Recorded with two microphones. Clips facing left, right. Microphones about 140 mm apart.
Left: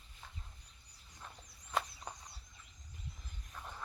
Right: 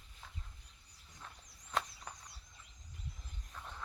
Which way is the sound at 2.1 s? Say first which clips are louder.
Left 3 dB; 20° left (ahead or behind).